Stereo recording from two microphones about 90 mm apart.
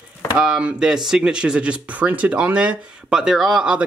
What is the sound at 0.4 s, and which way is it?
Speech, 10° right (ahead or behind).